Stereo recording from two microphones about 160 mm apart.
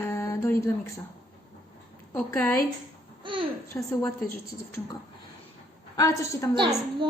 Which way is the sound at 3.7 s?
15° left (ahead or behind).